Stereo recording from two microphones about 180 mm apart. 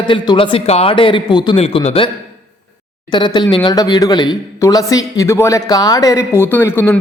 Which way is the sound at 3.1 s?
25° left (ahead or behind).